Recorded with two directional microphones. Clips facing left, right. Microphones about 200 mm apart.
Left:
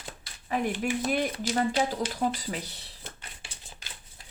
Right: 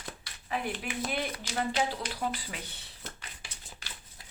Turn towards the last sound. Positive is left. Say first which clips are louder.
# left 2 dB
turn(degrees=35)  # may be behind; listen again after turning